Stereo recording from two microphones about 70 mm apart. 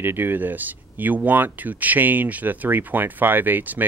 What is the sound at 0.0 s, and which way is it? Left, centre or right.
Speech, right.